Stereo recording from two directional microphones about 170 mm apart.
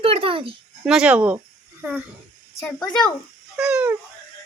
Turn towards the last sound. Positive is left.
turn(degrees=-5)  # may be behind; listen again after turning